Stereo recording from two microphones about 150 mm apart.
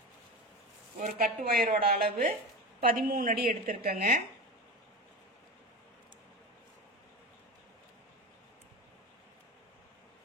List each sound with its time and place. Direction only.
1.0 s speech: 80° right; by 3.7 s 60° right (ahead or behind)
3.8 s speech: 80° right